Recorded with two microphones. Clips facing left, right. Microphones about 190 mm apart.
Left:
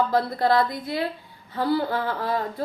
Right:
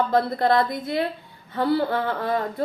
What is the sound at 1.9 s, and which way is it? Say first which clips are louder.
Speech: right 2 dB; 25° right (ahead or behind).